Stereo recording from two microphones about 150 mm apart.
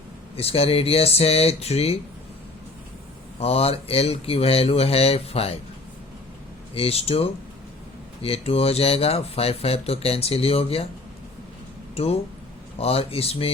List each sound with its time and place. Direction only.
0.3 s speech: 40° left (ahead or behind)
3.4 s speech: 40° left (ahead or behind)
6.7 s speech: 40° left (ahead or behind)
11.9 s speech: 40° left (ahead or behind)